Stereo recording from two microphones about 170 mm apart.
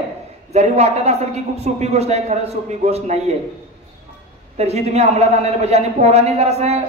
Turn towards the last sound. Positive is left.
turn(degrees=-40)  # may be behind; listen again after turning